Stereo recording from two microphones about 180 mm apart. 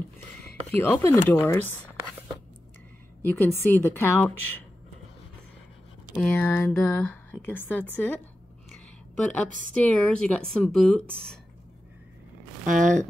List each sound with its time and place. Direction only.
0.7 s speech: 15° left (ahead or behind)
3.3 s speech: 10° left (ahead or behind)
6.2 s speech: 10° left (ahead or behind)
8.7 s a sound: 5° left (ahead or behind)
9.8 s speech: 5° left (ahead or behind)
12.6 s speech: 45° right (ahead or behind)